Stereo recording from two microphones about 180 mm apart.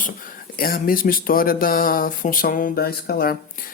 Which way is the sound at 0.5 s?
55° left (ahead or behind).